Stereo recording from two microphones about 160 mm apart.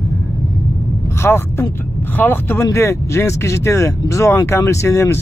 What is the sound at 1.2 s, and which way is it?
Speech, 15° left (ahead or behind).